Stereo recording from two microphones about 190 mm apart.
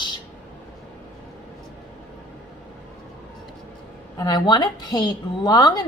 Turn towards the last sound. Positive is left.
turn(degrees=20)  # may be behind; listen again after turning